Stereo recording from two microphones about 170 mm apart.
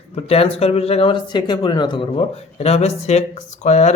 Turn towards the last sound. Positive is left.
turn(degrees=45)  # may be behind; listen again after turning